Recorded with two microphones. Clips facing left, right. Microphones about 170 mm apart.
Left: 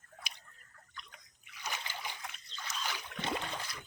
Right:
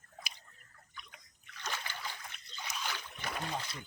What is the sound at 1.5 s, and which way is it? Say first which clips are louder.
Splash: even; 10° left (ahead or behind).